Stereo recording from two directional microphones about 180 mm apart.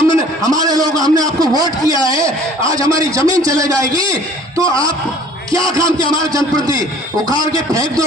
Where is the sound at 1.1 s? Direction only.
20° right (ahead or behind).